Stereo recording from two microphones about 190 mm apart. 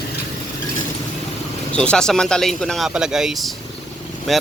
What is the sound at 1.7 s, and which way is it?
Speech, 5° left (ahead or behind).